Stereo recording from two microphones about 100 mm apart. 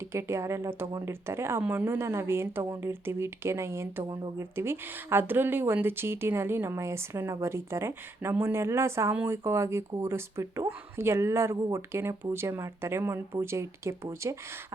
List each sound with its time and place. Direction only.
0.1 s speech: 25° right (ahead or behind)